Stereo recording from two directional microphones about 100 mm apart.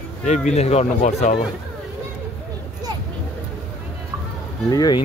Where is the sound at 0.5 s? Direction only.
90° left.